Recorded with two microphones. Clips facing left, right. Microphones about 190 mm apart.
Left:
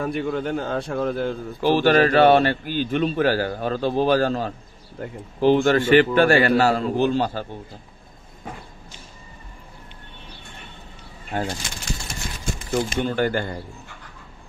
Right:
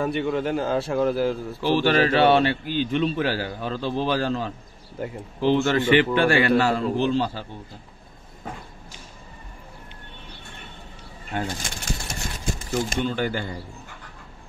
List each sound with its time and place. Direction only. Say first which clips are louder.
0.0 s a man's voice: right 1 dB; centre (ahead or behind)
1.6 s speech: left 4 dB; 45° left (ahead or behind)
5.0 s a man's voice: right 2 dB; 5° right (ahead or behind)
5.4 s speech: left 3 dB; 45° left (ahead or behind)
11.6 s pigeon: even; 45° right (ahead or behind)
13.0 s speech: left 3 dB; 50° left (ahead or behind)